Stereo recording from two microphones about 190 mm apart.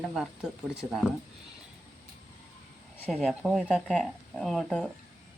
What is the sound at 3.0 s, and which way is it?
Speech, centre (ahead or behind).